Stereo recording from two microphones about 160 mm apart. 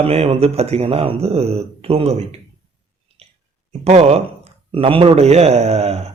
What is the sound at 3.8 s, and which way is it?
A man's voice, 40° right (ahead or behind).